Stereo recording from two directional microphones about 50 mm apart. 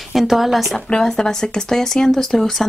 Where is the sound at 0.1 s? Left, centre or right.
Centre.